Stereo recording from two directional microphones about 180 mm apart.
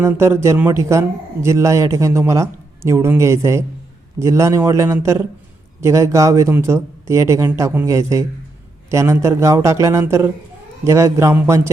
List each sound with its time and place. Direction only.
0.0 s speech: 15° right (ahead or behind)